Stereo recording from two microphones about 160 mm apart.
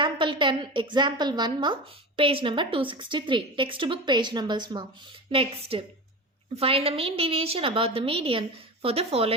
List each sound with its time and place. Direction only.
0.0 s a woman's voice: 30° right (ahead or behind)